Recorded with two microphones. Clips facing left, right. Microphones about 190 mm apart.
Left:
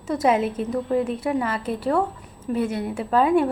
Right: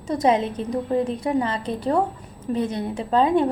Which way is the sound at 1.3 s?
25° right (ahead or behind).